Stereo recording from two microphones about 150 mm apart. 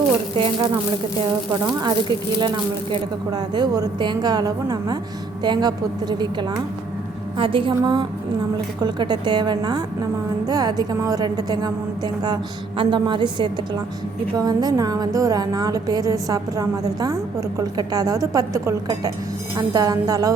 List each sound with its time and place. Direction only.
0.3 s speech: 35° right (ahead or behind)
1.8 s a woman's voice: 30° right (ahead or behind)